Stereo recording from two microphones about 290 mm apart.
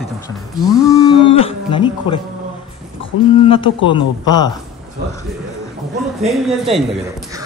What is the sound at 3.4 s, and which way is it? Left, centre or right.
Speech, centre.